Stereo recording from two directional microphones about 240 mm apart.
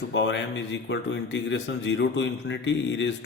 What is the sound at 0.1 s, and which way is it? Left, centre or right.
Speech, left.